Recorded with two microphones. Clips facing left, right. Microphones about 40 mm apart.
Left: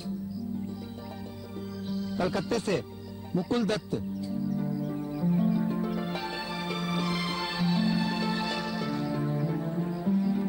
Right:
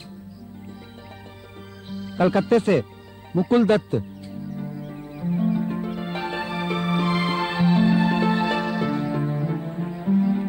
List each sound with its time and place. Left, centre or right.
1.9 s speech: right
3.3 s music: right